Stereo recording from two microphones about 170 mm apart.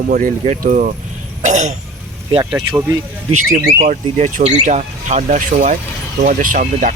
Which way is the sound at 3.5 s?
50° right (ahead or behind).